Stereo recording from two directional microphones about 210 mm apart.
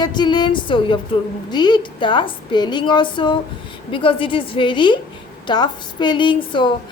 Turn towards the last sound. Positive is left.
turn(degrees=20)  # may be behind; listen again after turning